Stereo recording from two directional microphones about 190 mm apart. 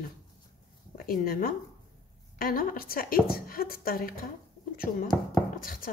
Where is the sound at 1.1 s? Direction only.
50° left (ahead or behind).